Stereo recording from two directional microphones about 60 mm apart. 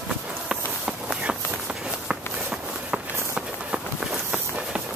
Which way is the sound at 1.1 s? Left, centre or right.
Centre.